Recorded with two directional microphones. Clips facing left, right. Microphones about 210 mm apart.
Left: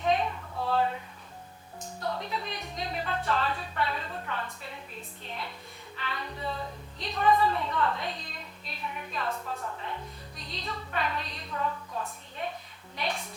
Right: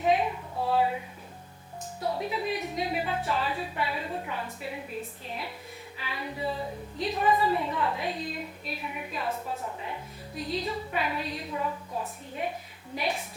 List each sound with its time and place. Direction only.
0.0 s a sound: 5° right (ahead or behind)
2.0 s a woman's voice: 10° right (ahead or behind)
6.0 s a woman's voice: 5° right (ahead or behind)